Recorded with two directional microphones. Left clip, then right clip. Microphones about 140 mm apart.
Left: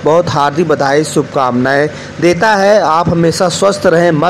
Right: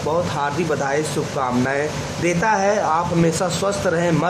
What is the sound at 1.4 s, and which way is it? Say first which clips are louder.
Speech: left 9 dB; 30° left (ahead or behind).